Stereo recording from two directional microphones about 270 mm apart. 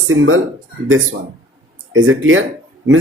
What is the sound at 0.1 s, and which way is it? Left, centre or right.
Speech, right.